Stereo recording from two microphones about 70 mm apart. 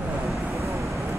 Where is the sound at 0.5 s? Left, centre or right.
Right.